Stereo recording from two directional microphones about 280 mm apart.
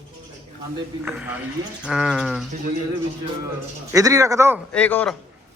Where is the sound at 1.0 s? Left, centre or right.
Centre.